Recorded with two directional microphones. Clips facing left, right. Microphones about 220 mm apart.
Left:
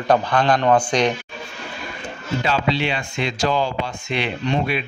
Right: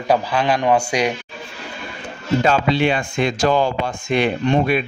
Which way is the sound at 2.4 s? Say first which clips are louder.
Right 4 dB; 50° right (ahead or behind).